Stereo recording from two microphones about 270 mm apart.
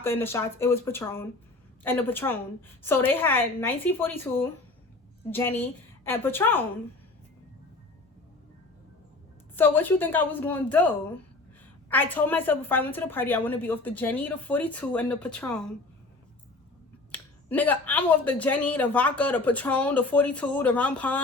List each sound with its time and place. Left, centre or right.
0.0 s a woman's voice: centre
9.6 s a woman's voice: centre
11.9 s a woman's voice: centre
17.1 s speech: centre